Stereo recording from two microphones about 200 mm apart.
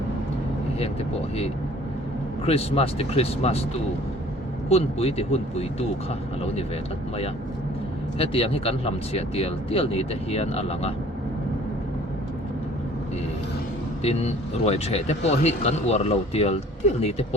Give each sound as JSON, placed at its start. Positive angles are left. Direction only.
{"t": 2.5, "sound": "speech", "side_deg": 30}
{"t": 4.7, "sound": "speech", "side_deg": 30}
{"t": 8.2, "sound": "speech", "side_deg": 30}
{"t": 14.0, "sound": "speech", "side_deg": 30}